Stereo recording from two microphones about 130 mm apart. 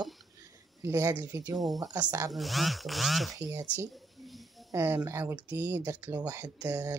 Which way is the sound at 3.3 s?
25° right (ahead or behind).